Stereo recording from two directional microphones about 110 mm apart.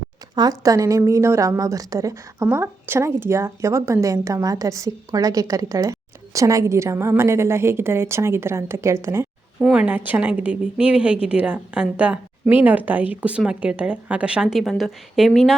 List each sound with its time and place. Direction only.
0.3 s a woman's voice: 35° right (ahead or behind)
9.6 s a woman's voice: 10° right (ahead or behind)